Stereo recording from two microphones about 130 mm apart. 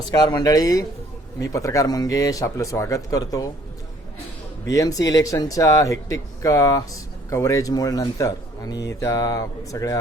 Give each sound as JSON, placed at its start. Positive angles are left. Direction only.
{"t": 0.3, "sound": "speech", "side_deg": 25}
{"t": 4.7, "sound": "speech", "side_deg": 25}